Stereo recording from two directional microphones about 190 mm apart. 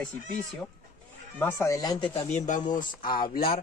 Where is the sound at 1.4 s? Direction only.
15° left (ahead or behind).